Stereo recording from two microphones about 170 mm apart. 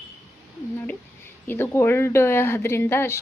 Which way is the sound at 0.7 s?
10° left (ahead or behind).